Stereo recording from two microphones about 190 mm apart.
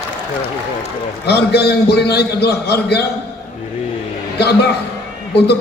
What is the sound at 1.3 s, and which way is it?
A man's voice, 60° left (ahead or behind).